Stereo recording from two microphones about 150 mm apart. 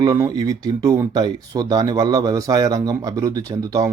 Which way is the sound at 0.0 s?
25° right (ahead or behind).